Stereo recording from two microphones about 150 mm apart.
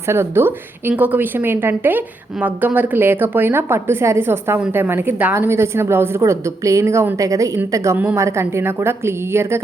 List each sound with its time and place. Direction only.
0.1 s a woman's voice: 15° right (ahead or behind)